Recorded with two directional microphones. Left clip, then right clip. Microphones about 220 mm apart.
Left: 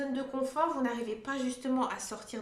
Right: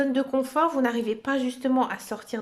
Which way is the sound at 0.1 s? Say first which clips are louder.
Right 9 dB; 45° right (ahead or behind).